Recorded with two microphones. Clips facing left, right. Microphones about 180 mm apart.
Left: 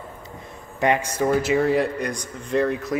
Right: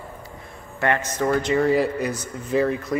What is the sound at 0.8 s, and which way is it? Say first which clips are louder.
Speech: left 2 dB; 15° left (ahead or behind).